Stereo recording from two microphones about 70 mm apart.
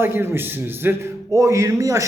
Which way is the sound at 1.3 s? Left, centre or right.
Right.